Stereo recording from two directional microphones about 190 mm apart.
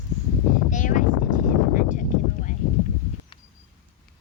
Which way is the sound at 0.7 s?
40° left (ahead or behind).